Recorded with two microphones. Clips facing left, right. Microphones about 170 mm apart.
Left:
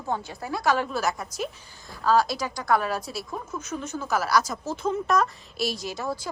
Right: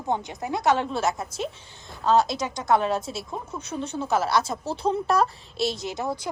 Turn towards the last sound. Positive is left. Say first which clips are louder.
# right 2 dB
turn(degrees=-20)  # may be behind; listen again after turning